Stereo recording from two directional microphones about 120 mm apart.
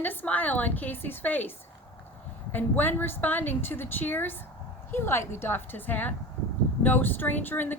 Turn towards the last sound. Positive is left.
turn(degrees=15)  # may be behind; listen again after turning